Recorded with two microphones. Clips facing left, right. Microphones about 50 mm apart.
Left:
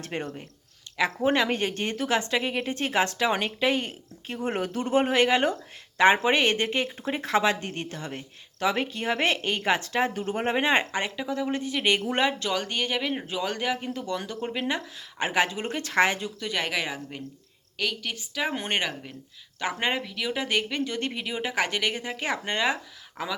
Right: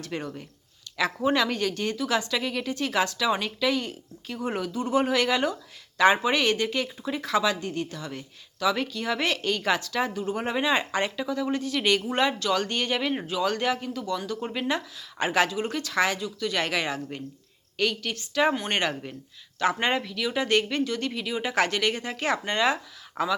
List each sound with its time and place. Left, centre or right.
0.0 s speech: left
10.2 s speech: left
10.9 s speech: centre
13.2 s speech: left
15.4 s speech: left
16.5 s speech: centre
19.5 s speech: centre
20.8 s speech: left
23.2 s speech: right